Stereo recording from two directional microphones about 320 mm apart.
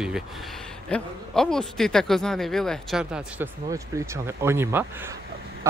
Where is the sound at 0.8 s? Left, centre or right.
Centre.